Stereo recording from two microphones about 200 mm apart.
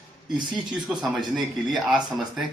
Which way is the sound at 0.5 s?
Centre (ahead or behind).